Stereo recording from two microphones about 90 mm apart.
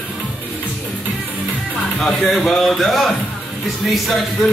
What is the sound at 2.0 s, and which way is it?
A man's voice, centre (ahead or behind).